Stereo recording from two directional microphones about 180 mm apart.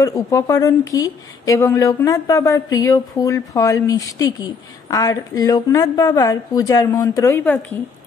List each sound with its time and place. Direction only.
0.0 s speech: 20° left (ahead or behind)